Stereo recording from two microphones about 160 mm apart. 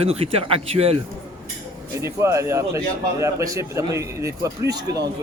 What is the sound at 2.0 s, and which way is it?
Speech, 15° right (ahead or behind).